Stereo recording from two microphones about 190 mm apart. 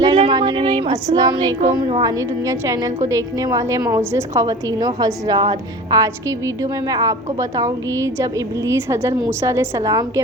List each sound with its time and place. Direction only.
0.0 s child singing: 25° right (ahead or behind)
1.7 s a woman's voice: 20° right (ahead or behind)